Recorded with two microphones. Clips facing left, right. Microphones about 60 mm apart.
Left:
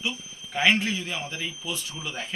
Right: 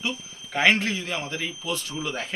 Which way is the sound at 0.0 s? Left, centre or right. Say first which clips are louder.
Right 1 dB; right.